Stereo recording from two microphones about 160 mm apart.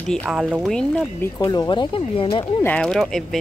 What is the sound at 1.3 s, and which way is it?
Speech, 25° left (ahead or behind).